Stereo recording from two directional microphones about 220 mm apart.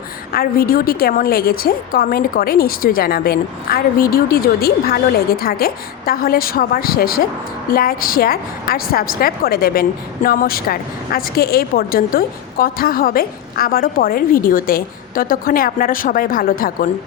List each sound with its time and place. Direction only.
0.3 s a woman's voice: 40° left (ahead or behind)